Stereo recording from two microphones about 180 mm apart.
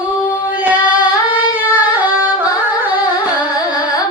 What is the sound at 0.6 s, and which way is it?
Singing, 10° right (ahead or behind).